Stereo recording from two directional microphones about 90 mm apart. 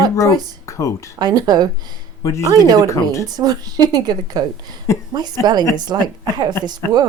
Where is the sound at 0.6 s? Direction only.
35° left (ahead or behind).